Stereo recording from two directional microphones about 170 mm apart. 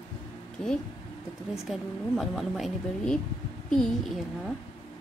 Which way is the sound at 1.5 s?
Centre (ahead or behind).